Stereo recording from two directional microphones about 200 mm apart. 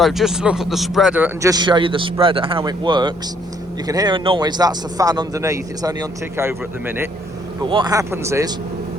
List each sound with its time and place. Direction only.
0.0 s a man's voice: centre (ahead or behind)
7.6 s speech: 20° right (ahead or behind)